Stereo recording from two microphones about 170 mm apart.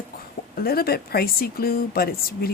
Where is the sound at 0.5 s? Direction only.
65° left (ahead or behind).